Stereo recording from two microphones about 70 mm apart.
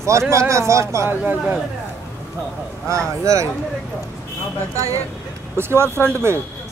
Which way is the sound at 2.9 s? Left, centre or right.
Right.